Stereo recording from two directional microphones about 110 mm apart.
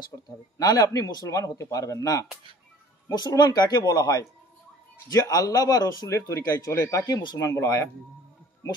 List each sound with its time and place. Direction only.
0.6 s speech: 35° left (ahead or behind)
7.3 s speech: 25° left (ahead or behind)